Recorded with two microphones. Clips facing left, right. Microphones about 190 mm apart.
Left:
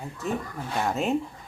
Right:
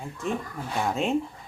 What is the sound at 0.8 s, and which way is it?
Speech, centre (ahead or behind).